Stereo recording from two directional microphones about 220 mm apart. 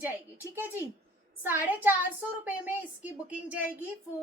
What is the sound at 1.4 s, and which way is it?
A woman's voice, 10° right (ahead or behind).